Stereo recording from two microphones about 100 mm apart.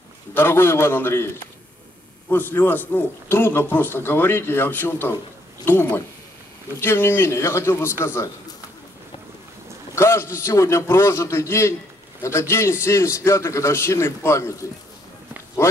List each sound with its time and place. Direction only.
0.3 s a man's voice: 20° left (ahead or behind)
9.9 s a man's voice: 25° left (ahead or behind)
15.6 s a sound: 25° left (ahead or behind)